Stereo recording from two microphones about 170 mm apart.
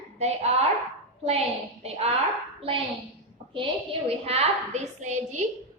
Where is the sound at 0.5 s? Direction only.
40° right (ahead or behind).